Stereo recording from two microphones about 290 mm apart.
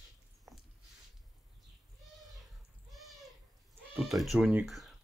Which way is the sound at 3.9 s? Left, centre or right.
Centre.